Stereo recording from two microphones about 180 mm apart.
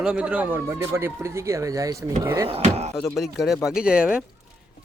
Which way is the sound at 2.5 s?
35° right (ahead or behind).